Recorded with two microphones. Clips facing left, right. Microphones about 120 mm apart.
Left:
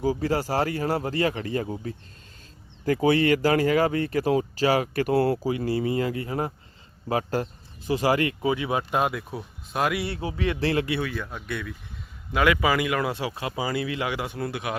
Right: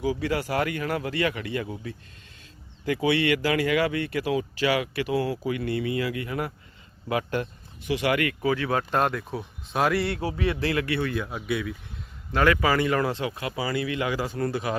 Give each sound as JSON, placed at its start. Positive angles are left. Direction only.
{"t": 0.0, "sound": "speech", "side_deg": 40}
{"t": 2.8, "sound": "speech", "side_deg": 40}
{"t": 5.5, "sound": "speech", "side_deg": 30}
{"t": 10.3, "sound": "speech", "side_deg": -35}
{"t": 10.6, "sound": "speech", "side_deg": 30}
{"t": 11.1, "sound": "speech", "side_deg": -5}
{"t": 12.3, "sound": "speech", "side_deg": 10}
{"t": 14.3, "sound": "speech", "side_deg": 5}